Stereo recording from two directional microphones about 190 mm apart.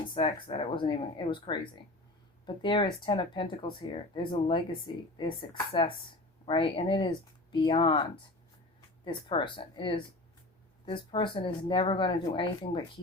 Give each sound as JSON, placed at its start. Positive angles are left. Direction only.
{"t": 0.1, "sound": "speech", "side_deg": 30}
{"t": 2.6, "sound": "speech", "side_deg": 25}